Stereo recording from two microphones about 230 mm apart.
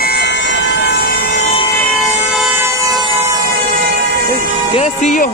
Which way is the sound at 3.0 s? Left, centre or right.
Right.